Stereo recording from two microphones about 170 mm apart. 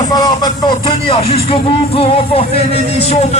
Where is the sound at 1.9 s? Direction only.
35° left (ahead or behind).